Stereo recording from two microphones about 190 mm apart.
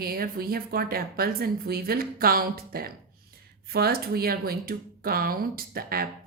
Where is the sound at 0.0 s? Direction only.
50° right (ahead or behind).